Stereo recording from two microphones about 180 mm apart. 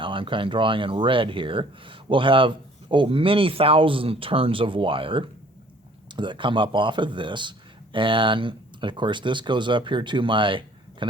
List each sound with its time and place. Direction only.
0.0 s speech: 30° right (ahead or behind)